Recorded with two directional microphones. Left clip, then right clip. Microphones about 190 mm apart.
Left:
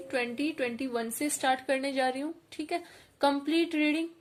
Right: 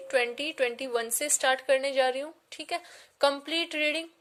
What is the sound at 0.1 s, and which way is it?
A woman's voice, 35° right (ahead or behind).